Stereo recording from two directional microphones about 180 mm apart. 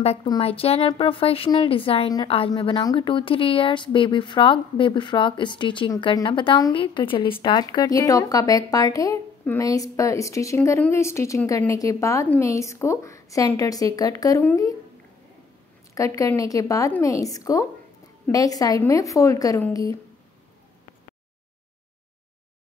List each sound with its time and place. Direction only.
0.0 s a woman's voice: 35° left (ahead or behind); by 14.8 s 20° left (ahead or behind)
15.9 s a woman's voice: 15° left (ahead or behind)